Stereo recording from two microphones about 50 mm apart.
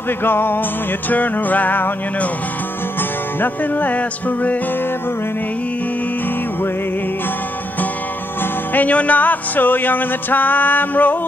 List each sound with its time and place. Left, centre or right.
0.2 s music: left
1.1 s music: left
3.3 s music: left
8.7 s music: left